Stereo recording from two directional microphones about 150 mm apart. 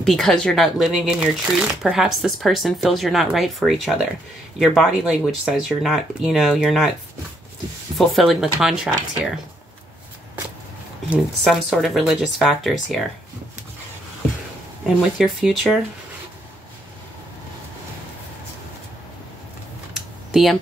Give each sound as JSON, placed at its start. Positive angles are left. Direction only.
{"t": 0.0, "sound": "speech", "side_deg": 5}
{"t": 8.0, "sound": "speech", "side_deg": 0}
{"t": 11.4, "sound": "speech", "side_deg": 0}
{"t": 15.1, "sound": "speech", "side_deg": 0}
{"t": 19.9, "sound": "computer keyboard", "side_deg": 0}